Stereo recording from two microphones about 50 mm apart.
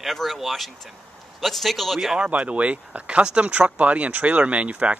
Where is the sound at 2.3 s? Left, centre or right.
Right.